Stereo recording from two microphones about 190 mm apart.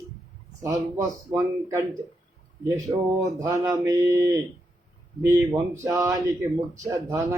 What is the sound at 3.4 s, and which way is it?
Speech, 20° right (ahead or behind).